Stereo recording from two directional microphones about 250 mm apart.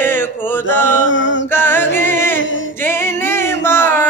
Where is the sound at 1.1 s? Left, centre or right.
Left.